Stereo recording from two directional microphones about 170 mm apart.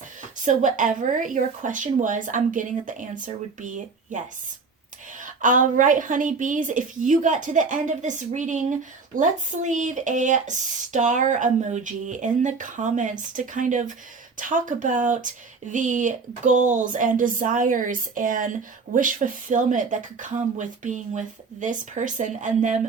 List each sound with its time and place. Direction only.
0.2 s speech: 50° right (ahead or behind)
5.2 s speech: 50° right (ahead or behind)